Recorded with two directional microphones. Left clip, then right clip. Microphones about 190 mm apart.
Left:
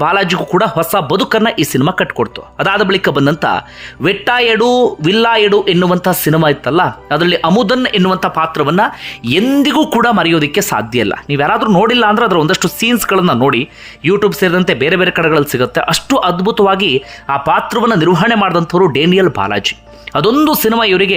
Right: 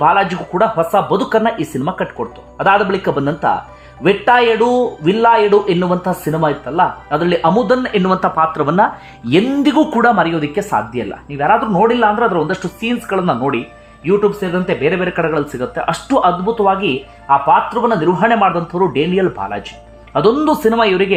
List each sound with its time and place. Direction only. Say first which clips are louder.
0.0 s speech: even; 30° left (ahead or behind); by 9.7 s 10° left (ahead or behind)
9.7 s speech: right 2 dB; 20° left (ahead or behind)